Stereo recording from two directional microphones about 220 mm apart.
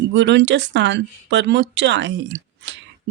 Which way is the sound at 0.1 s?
55° right (ahead or behind).